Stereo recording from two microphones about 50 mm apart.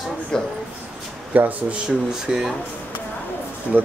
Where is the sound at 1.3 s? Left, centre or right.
Right.